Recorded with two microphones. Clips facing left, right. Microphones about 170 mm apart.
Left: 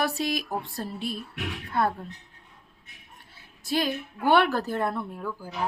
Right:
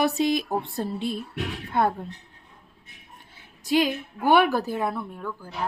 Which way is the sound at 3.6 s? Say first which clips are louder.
Right 4 dB; 15° right (ahead or behind).